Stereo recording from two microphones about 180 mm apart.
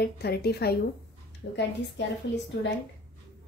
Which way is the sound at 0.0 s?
65° left (ahead or behind).